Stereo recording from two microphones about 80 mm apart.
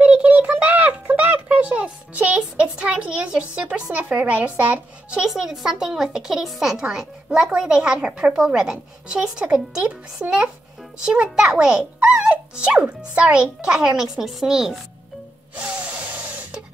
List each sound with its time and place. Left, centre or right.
0.0 s a sound: centre
3.9 s a child's voice: centre
5.2 s speech: centre
15.5 s tools: centre